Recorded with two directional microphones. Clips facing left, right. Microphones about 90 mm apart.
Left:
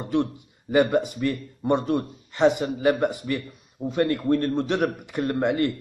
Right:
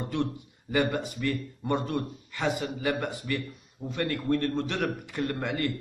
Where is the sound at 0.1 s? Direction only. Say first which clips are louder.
Left 10 dB; 20° left (ahead or behind).